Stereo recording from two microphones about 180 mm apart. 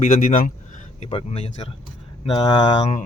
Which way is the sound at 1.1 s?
35° left (ahead or behind).